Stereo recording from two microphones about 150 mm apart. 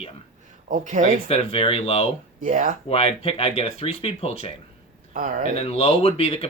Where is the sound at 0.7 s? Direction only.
55° right (ahead or behind).